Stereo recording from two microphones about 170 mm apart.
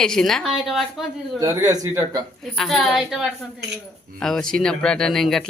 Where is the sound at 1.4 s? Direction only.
20° right (ahead or behind).